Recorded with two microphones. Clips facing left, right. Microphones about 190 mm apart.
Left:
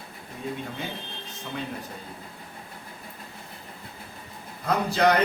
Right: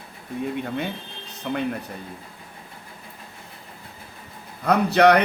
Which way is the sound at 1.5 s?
60° right (ahead or behind).